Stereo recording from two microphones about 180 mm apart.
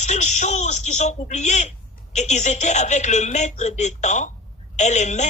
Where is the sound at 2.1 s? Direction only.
40° left (ahead or behind).